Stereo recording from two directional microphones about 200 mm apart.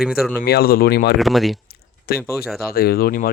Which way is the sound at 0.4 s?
50° left (ahead or behind).